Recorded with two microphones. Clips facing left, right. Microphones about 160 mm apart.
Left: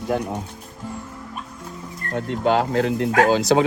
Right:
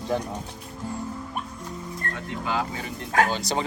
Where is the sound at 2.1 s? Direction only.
60° left (ahead or behind); by 3.6 s 90° left.